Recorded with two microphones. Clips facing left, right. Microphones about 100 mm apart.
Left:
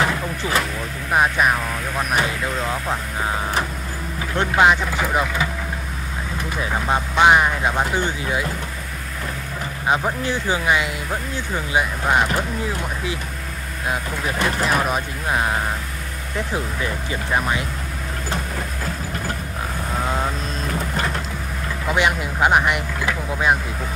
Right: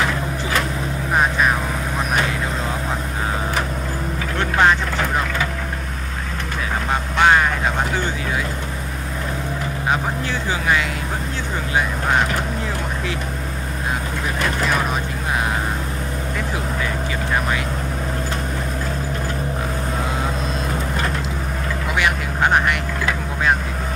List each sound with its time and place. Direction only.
1.1 s vehicle: 5° left (ahead or behind)
4.6 s vehicle: 10° left (ahead or behind)
6.9 s vehicle: 15° left (ahead or behind)
10.5 s music: 15° left (ahead or behind)
11.7 s vehicle: 10° left (ahead or behind)
14.6 s vehicle: 5° left (ahead or behind)
22.4 s vehicle: 10° left (ahead or behind)